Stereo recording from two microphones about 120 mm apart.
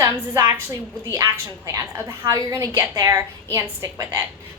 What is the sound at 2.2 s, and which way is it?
Child singing, 25° right (ahead or behind).